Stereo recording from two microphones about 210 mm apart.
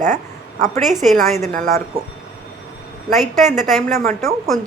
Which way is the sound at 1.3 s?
35° right (ahead or behind).